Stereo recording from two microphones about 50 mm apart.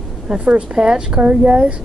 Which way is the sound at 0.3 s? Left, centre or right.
Centre.